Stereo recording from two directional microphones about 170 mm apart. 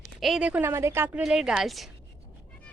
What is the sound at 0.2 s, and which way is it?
A woman's voice, 5° right (ahead or behind).